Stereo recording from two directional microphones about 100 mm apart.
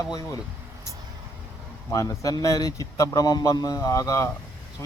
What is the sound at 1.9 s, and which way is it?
Speech, 35° left (ahead or behind).